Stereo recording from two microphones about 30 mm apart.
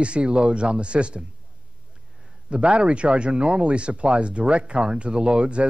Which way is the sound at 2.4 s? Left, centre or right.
Right.